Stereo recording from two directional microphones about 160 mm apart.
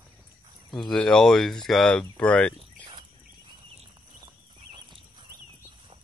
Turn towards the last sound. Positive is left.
turn(degrees=-30)  # may be behind; listen again after turning